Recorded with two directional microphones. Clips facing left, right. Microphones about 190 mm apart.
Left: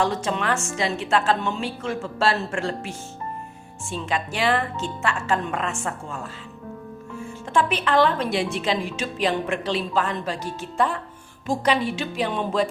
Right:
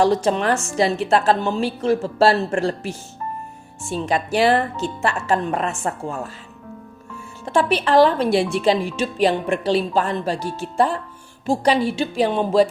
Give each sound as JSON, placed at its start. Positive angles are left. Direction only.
{"t": 0.0, "sound": "speech", "side_deg": -40}
{"t": 4.0, "sound": "speech", "side_deg": -40}
{"t": 7.4, "sound": "speech", "side_deg": -35}